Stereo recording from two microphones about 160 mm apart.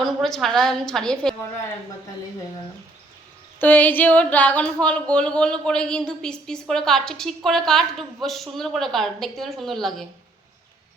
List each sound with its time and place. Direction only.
0.0 s speech: centre (ahead or behind)
3.6 s speech: 10° left (ahead or behind)